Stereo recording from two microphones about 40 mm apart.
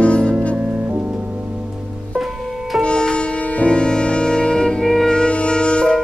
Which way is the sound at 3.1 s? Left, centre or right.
Left.